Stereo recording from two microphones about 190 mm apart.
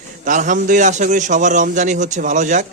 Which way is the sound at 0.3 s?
40° right (ahead or behind).